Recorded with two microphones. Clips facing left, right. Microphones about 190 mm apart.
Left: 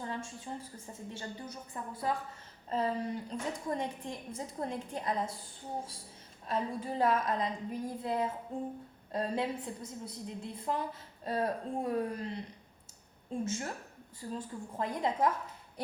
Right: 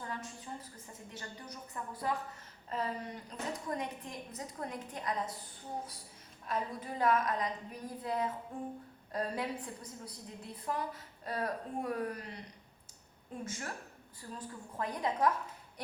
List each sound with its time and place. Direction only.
0.5 s a woman's voice: 30° left (ahead or behind)
6.5 s a woman's voice: 30° left (ahead or behind)
13.4 s a woman's voice: 25° left (ahead or behind)